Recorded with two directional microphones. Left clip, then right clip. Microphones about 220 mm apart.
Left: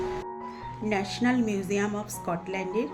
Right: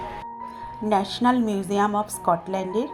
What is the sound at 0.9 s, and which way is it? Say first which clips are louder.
Speech: right 7 dB; 15° right (ahead or behind).